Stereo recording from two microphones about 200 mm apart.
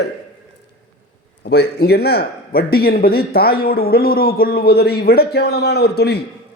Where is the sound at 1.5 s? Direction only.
55° left (ahead or behind).